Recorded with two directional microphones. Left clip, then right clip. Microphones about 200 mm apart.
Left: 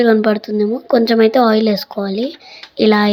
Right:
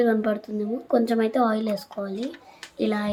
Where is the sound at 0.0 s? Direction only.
30° left (ahead or behind).